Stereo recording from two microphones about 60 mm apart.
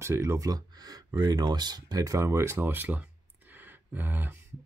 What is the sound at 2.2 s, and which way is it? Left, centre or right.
Speech, right.